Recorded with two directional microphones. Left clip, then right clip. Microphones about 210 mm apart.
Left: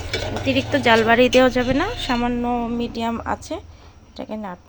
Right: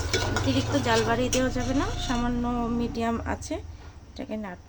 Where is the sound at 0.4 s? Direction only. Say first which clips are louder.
Left 8 dB; 30° left (ahead or behind).